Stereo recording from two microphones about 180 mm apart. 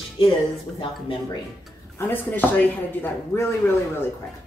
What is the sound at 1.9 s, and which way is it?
Speech, 10° left (ahead or behind).